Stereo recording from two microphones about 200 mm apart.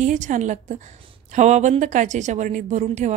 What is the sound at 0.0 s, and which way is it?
A woman's voice, 40° right (ahead or behind).